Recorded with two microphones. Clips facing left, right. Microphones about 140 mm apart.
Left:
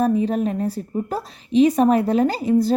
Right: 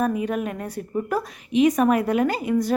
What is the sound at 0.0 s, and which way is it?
A woman's voice, 30° left (ahead or behind).